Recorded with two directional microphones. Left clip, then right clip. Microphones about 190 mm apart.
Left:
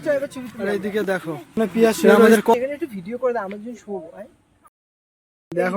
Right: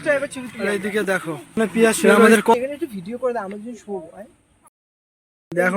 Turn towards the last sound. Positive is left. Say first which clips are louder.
# right 2 dB
turn(degrees=0)  # may be behind; listen again after turning